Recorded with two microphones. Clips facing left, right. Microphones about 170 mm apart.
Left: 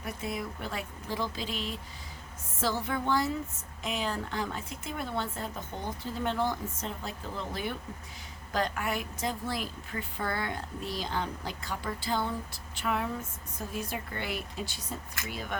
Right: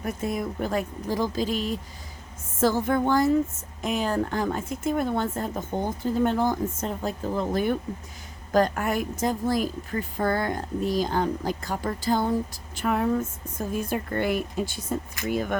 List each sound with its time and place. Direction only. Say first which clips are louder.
0.0 s a woman's voice: right 7 dB; 45° right (ahead or behind)